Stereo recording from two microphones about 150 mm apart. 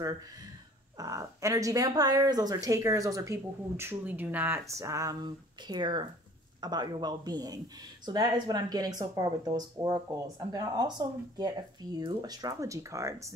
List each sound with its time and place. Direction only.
0.9 s speech: 20° right (ahead or behind)